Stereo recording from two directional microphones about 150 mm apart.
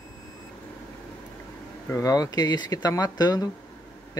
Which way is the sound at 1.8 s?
20° left (ahead or behind).